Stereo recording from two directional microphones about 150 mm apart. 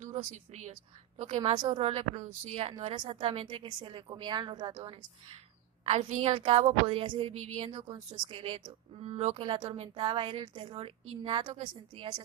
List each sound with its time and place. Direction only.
0.0 s speech: 55° right (ahead or behind)
1.4 s speech: 30° right (ahead or behind)
2.9 s speech: 35° right (ahead or behind)
5.8 s speech: 45° right (ahead or behind)
6.3 s speech: 35° right (ahead or behind)
7.9 s speech: 30° right (ahead or behind)